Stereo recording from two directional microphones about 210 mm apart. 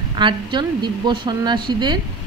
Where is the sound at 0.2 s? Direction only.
20° right (ahead or behind).